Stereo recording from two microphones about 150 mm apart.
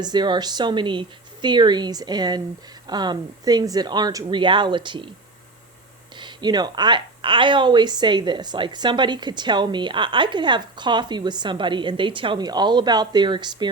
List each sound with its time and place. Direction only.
0.0 s speech: 30° right (ahead or behind)
6.1 s speech: 30° right (ahead or behind)